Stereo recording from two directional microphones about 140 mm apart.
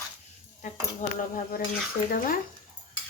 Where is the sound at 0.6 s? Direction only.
75° left (ahead or behind).